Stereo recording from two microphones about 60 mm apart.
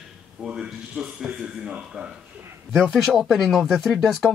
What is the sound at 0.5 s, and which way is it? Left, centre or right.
Speech, centre.